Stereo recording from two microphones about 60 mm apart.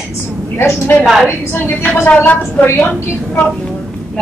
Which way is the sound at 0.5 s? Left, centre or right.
Left.